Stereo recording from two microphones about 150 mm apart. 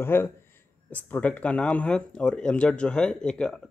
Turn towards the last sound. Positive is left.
turn(degrees=5)  # may be behind; listen again after turning